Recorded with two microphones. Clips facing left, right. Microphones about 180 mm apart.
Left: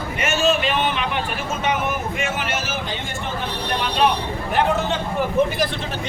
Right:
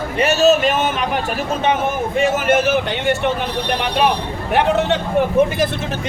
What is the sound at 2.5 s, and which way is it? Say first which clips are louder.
Speech: right 11 dB; 60° right (ahead or behind).